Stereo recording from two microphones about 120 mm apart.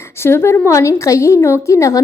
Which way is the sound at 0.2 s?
20° left (ahead or behind).